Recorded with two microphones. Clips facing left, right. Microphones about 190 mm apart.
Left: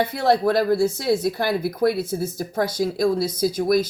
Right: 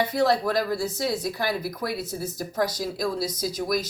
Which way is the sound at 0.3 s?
55° left (ahead or behind).